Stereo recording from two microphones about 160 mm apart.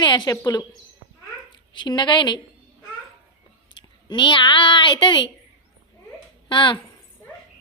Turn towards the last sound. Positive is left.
turn(degrees=30)  # may be behind; listen again after turning